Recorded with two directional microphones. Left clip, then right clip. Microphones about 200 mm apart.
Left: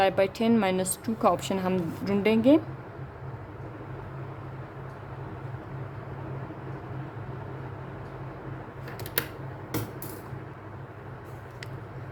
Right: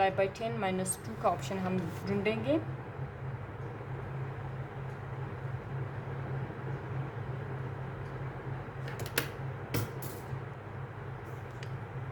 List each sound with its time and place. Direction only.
0.0 s a woman's voice: 50° left (ahead or behind)